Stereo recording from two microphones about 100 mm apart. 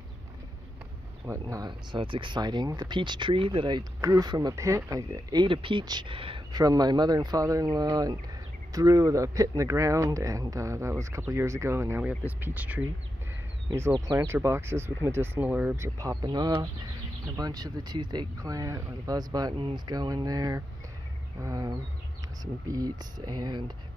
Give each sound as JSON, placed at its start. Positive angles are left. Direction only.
{"t": 1.3, "sound": "speech", "side_deg": -30}
{"t": 1.7, "sound": "speech", "side_deg": -55}
{"t": 6.5, "sound": "speech", "side_deg": -40}
{"t": 12.0, "sound": "speech", "side_deg": -15}
{"t": 14.0, "sound": "speech", "side_deg": -30}
{"t": 15.7, "sound": "speech", "side_deg": -30}
{"t": 16.3, "sound": "speech", "side_deg": -50}
{"t": 19.5, "sound": "speech", "side_deg": -50}